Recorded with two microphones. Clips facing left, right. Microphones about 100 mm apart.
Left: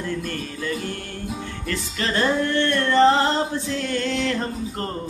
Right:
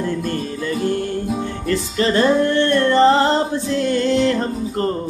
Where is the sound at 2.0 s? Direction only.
10° right (ahead or behind).